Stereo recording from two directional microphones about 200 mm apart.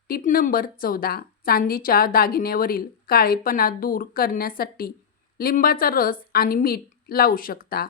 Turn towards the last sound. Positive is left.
turn(degrees=50)  # may be behind; listen again after turning